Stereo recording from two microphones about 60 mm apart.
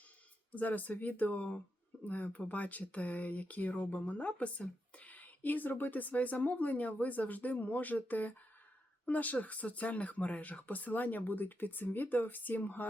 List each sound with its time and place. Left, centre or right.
0.5 s speech: left